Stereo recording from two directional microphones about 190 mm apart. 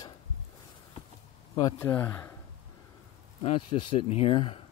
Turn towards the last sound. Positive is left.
turn(degrees=30)  # may be behind; listen again after turning